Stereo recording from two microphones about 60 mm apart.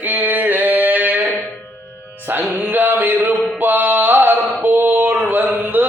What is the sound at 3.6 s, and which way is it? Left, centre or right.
Music, right.